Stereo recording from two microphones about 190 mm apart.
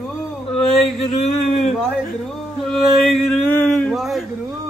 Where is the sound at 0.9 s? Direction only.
35° left (ahead or behind).